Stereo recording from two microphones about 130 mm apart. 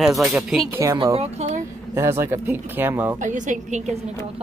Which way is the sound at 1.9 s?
20° right (ahead or behind).